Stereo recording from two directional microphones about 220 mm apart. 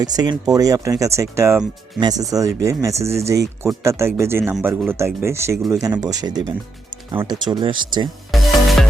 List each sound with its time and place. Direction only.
0.0 s speech: 15° right (ahead or behind)
8.3 s music: centre (ahead or behind)